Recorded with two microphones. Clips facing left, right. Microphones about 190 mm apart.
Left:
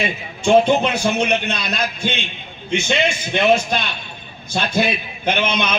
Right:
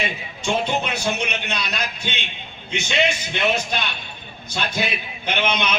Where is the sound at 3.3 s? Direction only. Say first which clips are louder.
Left 10 dB; 55° left (ahead or behind).